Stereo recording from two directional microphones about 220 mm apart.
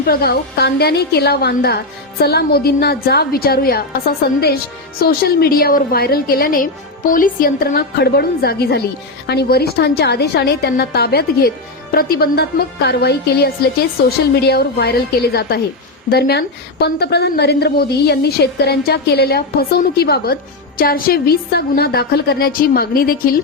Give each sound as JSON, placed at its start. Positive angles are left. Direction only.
{"t": 0.0, "sound": "a woman's voice", "side_deg": 45}
{"t": 4.9, "sound": "a woman's voice", "side_deg": 45}